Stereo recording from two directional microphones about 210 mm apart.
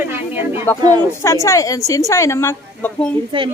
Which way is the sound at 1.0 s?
15° left (ahead or behind).